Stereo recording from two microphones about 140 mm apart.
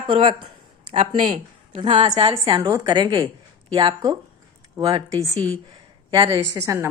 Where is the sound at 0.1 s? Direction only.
40° right (ahead or behind).